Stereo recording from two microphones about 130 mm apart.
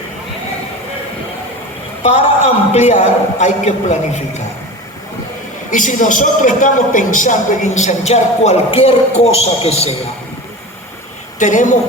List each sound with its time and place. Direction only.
2.0 s a man's voice: 55° left (ahead or behind)
5.7 s a man's voice: 80° left; by 9.3 s 50° left (ahead or behind)
11.3 s a man's voice: 75° left (ahead or behind)